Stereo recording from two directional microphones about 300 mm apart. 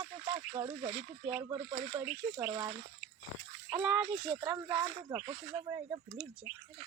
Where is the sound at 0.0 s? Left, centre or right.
Centre.